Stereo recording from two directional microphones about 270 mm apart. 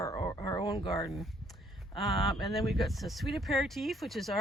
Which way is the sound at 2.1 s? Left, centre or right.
Centre.